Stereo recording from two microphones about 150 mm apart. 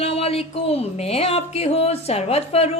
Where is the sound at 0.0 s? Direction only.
40° left (ahead or behind).